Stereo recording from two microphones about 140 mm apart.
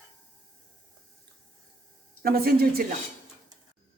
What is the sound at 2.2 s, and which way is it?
Speech, 90° right.